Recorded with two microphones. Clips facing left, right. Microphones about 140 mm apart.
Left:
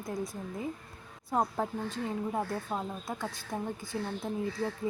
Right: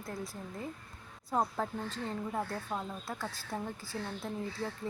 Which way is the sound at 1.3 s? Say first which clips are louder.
Left 2 dB; 15° left (ahead or behind).